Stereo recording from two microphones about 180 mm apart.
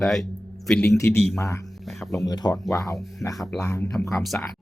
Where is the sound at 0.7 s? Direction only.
10° left (ahead or behind).